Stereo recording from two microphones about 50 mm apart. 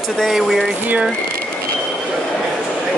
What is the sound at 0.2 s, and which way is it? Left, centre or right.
Speech, centre.